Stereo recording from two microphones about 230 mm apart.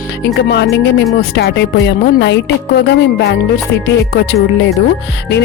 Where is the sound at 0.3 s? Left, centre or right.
Left.